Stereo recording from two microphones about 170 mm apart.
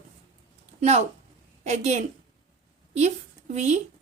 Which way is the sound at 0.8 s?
40° right (ahead or behind).